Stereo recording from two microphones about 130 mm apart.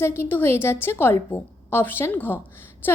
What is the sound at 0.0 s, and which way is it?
A woman's voice, 20° left (ahead or behind).